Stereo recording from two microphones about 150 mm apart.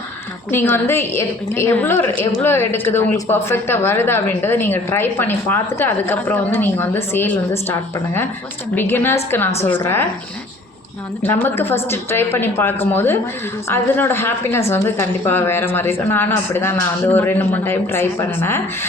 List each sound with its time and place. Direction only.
0.5 s a woman's voice: 15° left (ahead or behind)
11.2 s a woman's voice: 15° left (ahead or behind)